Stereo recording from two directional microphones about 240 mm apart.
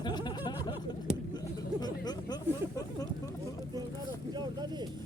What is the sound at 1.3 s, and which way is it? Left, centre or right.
Speech, centre.